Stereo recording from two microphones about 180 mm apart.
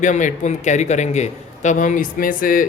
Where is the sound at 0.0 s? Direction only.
45° left (ahead or behind).